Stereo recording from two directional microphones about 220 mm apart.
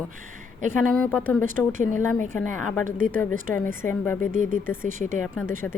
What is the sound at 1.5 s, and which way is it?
Speech, 35° right (ahead or behind).